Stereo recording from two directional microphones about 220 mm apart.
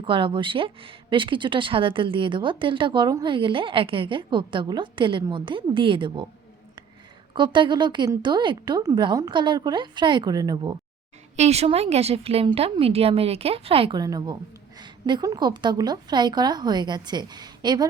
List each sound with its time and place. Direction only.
0.0 s speech: 25° right (ahead or behind)
7.3 s speech: 20° right (ahead or behind)
11.3 s speech: 30° right (ahead or behind)